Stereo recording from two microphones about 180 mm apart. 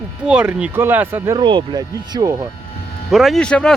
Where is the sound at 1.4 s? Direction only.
25° right (ahead or behind).